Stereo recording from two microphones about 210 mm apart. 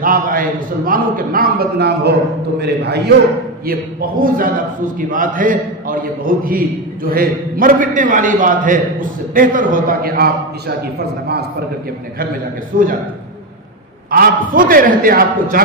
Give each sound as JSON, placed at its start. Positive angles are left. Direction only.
{"t": 0.0, "sound": "a man's voice", "side_deg": -40}
{"t": 14.1, "sound": "a man's voice", "side_deg": -40}